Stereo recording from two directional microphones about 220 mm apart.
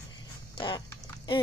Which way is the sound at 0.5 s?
20° left (ahead or behind).